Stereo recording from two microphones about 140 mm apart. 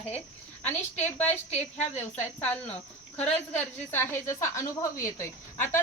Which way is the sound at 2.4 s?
10° left (ahead or behind).